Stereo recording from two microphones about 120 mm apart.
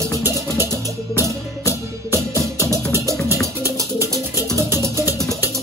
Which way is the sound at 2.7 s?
25° right (ahead or behind).